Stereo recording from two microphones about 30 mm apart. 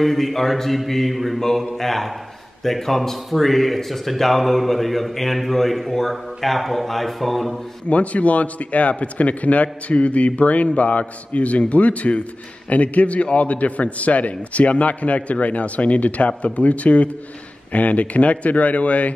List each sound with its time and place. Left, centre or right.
0.0 s speech: centre
7.9 s a man's voice: left